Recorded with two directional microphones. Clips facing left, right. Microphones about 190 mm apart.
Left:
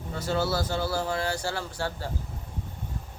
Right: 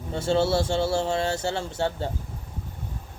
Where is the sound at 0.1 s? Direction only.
25° right (ahead or behind).